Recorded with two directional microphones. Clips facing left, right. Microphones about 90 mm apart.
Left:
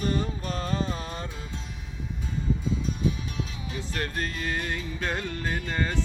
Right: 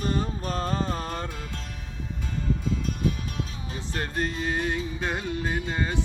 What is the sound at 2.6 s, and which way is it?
Music, 50° right (ahead or behind).